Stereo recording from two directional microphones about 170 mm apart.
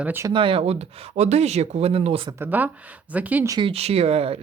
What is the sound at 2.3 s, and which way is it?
Speech, 10° right (ahead or behind).